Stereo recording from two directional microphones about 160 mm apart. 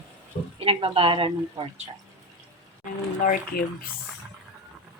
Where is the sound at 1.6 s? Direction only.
20° right (ahead or behind).